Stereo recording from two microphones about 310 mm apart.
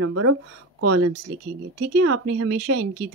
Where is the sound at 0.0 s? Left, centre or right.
Right.